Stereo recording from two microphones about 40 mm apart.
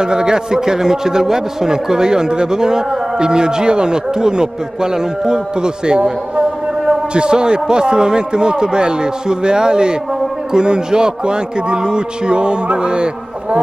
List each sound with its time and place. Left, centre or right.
0.0 s a man's voice: centre